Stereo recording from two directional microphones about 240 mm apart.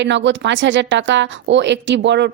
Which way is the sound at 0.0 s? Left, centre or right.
Right.